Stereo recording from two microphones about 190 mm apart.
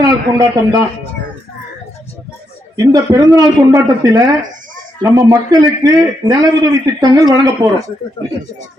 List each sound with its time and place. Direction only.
0.0 s a man's voice: 20° right (ahead or behind)
2.7 s a man's voice: 20° right (ahead or behind)